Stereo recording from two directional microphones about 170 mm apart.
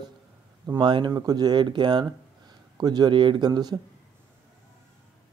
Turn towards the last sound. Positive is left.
turn(degrees=-25)  # may be behind; listen again after turning